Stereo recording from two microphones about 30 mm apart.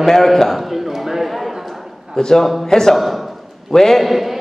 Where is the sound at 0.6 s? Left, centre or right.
Centre.